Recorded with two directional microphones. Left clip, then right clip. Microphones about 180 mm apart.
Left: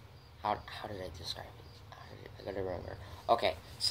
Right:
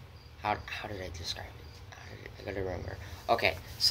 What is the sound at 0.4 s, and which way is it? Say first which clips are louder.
Speech: right 2 dB; 5° left (ahead or behind).